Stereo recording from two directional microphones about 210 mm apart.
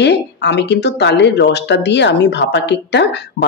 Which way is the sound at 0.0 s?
55° left (ahead or behind).